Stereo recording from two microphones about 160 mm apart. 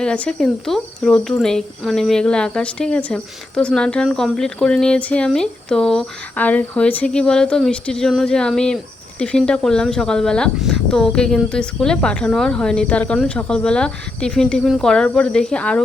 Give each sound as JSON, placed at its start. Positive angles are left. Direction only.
{"t": 0.0, "sound": "speech", "side_deg": 5}